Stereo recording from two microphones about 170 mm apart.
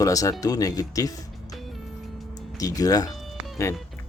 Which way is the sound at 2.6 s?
20° left (ahead or behind).